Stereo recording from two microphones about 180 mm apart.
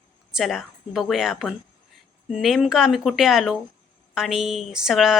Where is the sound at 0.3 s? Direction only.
Centre (ahead or behind).